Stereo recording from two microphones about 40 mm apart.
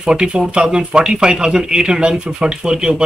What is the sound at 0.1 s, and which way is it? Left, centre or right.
Speech, right.